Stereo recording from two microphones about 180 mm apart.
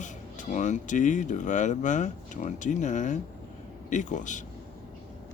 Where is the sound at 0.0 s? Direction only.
45° left (ahead or behind).